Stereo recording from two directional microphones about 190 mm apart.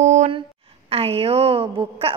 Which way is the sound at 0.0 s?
40° right (ahead or behind).